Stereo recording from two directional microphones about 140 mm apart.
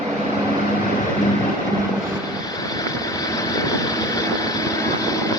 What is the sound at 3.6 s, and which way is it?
Vehicle, 25° left (ahead or behind).